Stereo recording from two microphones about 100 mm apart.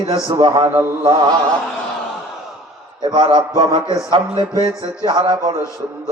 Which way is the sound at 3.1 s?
55° right (ahead or behind).